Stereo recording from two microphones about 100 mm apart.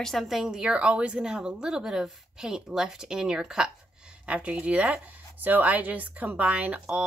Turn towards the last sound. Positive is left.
turn(degrees=-10)  # may be behind; listen again after turning